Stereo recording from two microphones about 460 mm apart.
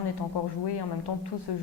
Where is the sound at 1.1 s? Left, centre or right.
Left.